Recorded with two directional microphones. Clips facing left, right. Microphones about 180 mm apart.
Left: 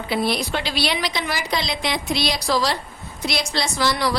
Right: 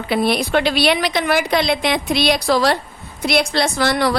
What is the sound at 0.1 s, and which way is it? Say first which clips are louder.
A woman's voice: right 6 dB; 55° right (ahead or behind).